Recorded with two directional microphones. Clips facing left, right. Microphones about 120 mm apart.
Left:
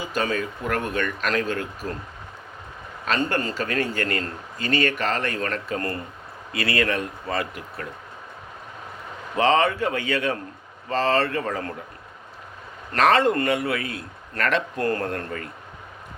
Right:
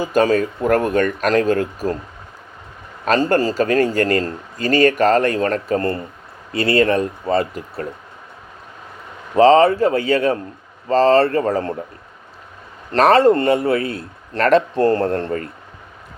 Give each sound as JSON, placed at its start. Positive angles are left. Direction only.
{"t": 0.0, "sound": "speech", "side_deg": -45}
{"t": 3.1, "sound": "a man's voice", "side_deg": -40}
{"t": 9.3, "sound": "a man's voice", "side_deg": -35}
{"t": 12.9, "sound": "a man's voice", "side_deg": -35}